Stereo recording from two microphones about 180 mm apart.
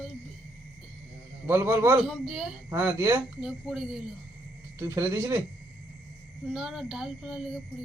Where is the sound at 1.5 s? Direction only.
15° right (ahead or behind).